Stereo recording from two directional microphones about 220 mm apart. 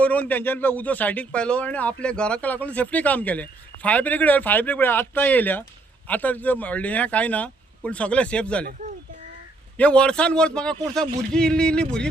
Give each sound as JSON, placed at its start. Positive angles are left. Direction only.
{"t": 0.0, "sound": "a man's voice", "side_deg": 5}
{"t": 9.7, "sound": "a man's voice", "side_deg": 5}